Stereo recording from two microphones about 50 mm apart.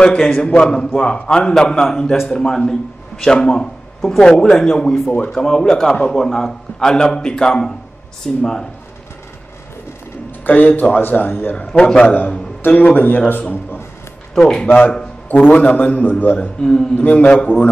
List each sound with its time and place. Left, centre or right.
0.0 s a man's voice: centre
10.4 s speech: left
11.8 s a man's voice: centre
12.1 s a man's voice: left
14.3 s speech: centre
15.3 s a man's voice: left